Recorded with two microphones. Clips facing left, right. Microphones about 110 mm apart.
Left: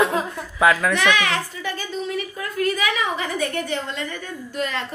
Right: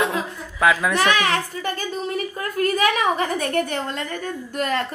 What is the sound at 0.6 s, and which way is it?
Speech, centre (ahead or behind).